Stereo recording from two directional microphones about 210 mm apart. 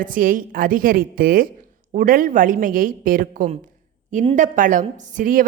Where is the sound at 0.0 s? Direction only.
40° right (ahead or behind).